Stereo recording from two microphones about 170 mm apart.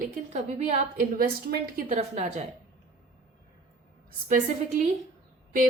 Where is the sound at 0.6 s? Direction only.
55° right (ahead or behind).